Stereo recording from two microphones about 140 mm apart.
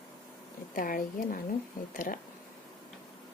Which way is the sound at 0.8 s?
80° left.